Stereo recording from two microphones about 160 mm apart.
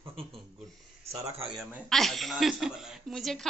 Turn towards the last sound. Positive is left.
turn(degrees=0)  # may be behind; listen again after turning